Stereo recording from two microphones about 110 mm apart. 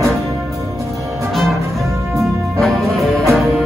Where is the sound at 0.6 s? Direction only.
25° right (ahead or behind).